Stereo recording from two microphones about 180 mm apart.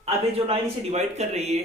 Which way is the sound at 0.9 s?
35° right (ahead or behind).